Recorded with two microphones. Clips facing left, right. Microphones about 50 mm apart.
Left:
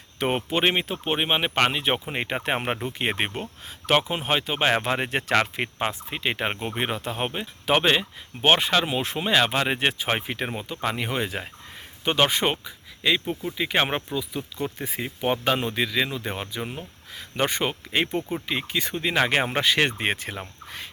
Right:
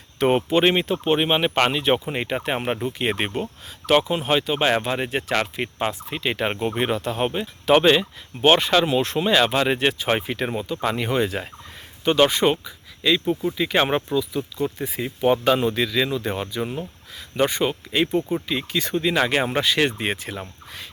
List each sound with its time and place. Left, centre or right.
0.2 s speech: centre
2.2 s speech: left
3.0 s speech: left
4.8 s speech: left
5.3 s speech: left
5.8 s speech: left
12.0 s speech: left
14.6 s speech: left
15.0 s speech: left
17.2 s speech: left
18.7 s speech: centre
19.0 s speech: left
20.7 s a sound: left